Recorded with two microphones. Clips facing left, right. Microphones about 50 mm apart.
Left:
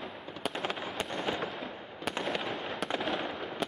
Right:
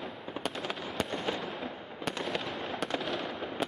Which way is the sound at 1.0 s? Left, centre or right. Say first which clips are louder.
Right 1 dB; centre.